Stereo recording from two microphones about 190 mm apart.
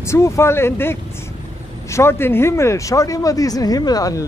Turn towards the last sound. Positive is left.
turn(degrees=20)  # may be behind; listen again after turning